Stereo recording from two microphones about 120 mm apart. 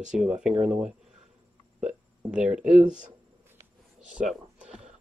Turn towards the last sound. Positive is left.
turn(degrees=-10)  # may be behind; listen again after turning